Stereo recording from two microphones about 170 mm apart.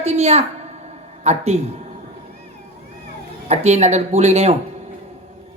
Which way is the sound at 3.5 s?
40° right (ahead or behind).